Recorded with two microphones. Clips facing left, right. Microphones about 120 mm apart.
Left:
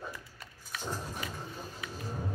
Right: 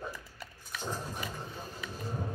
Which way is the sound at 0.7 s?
Centre (ahead or behind).